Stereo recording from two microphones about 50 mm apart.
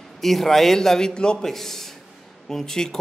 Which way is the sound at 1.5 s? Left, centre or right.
Centre.